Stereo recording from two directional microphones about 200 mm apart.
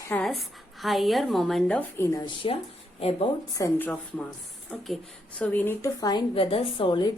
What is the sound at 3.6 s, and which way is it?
A woman's voice, 10° left (ahead or behind).